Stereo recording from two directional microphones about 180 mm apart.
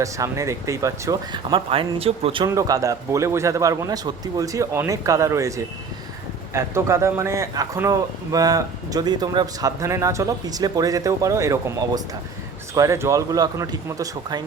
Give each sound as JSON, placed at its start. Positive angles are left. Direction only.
{"t": 0.0, "sound": "a man's voice", "side_deg": -15}
{"t": 2.6, "sound": "a man's voice", "side_deg": -20}